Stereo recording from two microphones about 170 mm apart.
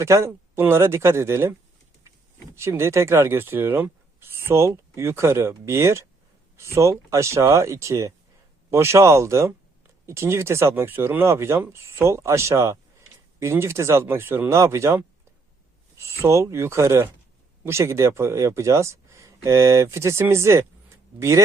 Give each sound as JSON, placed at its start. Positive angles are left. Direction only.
{"t": 0.0, "sound": "speech", "side_deg": -15}
{"t": 2.6, "sound": "speech", "side_deg": -15}